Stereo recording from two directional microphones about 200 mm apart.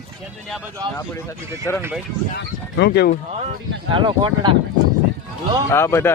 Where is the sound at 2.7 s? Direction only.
55° left (ahead or behind).